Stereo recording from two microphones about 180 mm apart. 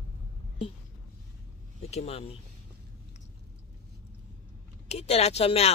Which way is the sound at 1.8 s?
35° left (ahead or behind).